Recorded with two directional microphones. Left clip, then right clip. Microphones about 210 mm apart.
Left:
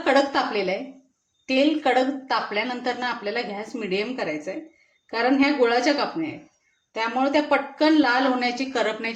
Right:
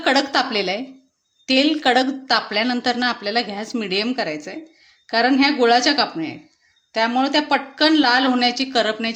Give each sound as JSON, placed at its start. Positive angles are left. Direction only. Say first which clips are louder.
{"t": 0.0, "sound": "a woman's voice", "louder": "right 2 dB", "side_deg": -45}